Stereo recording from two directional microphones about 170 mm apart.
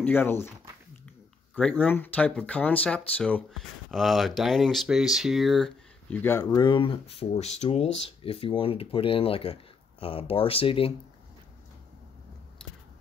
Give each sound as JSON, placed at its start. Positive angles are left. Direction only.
{"t": 0.0, "sound": "speech", "side_deg": 10}